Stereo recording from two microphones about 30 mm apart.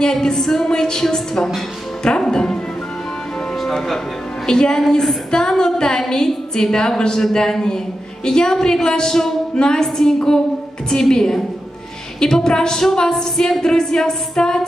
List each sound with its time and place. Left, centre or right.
0.0 s music: centre
0.7 s a woman's voice: left
2.0 s music: left
3.7 s music: centre
4.5 s a woman's voice: left
10.9 s music: centre
12.2 s a woman's voice: left